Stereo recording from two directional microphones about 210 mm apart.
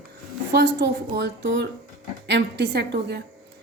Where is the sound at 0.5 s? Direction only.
50° right (ahead or behind).